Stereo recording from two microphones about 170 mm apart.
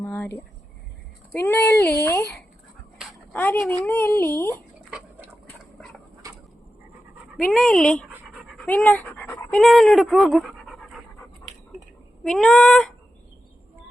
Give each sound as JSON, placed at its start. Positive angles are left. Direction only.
{"t": 0.0, "sound": "a sound", "side_deg": 10}
{"t": 1.3, "sound": "speech", "side_deg": 10}
{"t": 3.7, "sound": "speech", "side_deg": 10}
{"t": 6.2, "sound": "a sound", "side_deg": -20}
{"t": 7.3, "sound": "fowl", "side_deg": 5}
{"t": 8.1, "sound": "dog", "side_deg": -5}
{"t": 8.6, "sound": "speech", "side_deg": 10}
{"t": 12.2, "sound": "fowl", "side_deg": 0}